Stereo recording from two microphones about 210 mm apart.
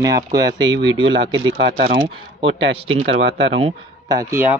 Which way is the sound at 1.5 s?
45° right (ahead or behind).